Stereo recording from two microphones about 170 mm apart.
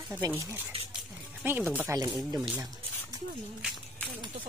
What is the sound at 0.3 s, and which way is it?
Speech, 15° right (ahead or behind).